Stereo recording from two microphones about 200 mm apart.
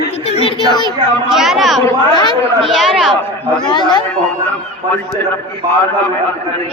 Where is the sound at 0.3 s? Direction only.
30° left (ahead or behind).